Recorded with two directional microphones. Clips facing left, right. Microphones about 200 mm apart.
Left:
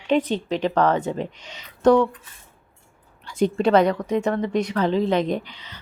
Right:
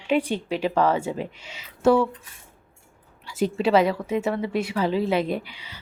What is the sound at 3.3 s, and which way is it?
A woman's voice, 5° right (ahead or behind).